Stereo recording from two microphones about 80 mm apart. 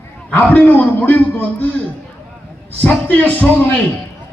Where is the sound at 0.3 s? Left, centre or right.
Left.